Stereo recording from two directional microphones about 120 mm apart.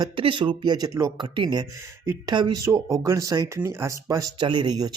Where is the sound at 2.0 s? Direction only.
25° right (ahead or behind).